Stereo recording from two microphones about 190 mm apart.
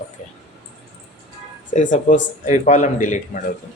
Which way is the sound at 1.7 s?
40° left (ahead or behind).